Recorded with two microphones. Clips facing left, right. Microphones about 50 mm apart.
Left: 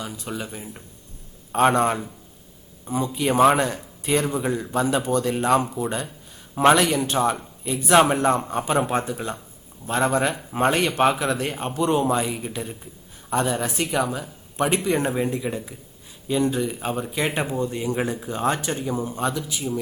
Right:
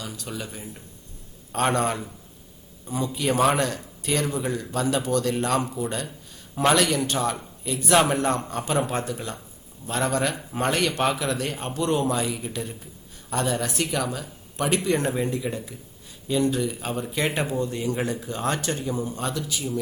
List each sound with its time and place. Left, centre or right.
0.0 s speech: centre